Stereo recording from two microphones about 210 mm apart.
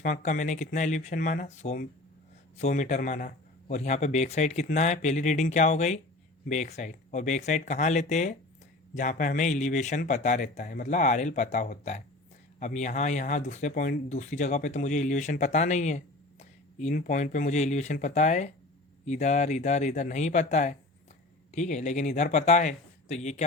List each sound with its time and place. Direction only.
0.0 s speech: 35° left (ahead or behind)